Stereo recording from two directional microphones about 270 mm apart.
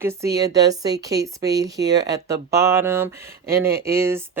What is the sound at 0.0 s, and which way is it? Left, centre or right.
Speech, centre.